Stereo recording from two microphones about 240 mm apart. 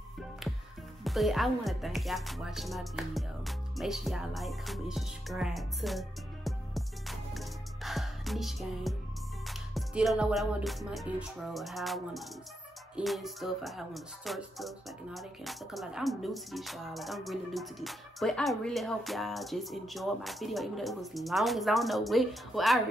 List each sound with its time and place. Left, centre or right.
1.0 s music: centre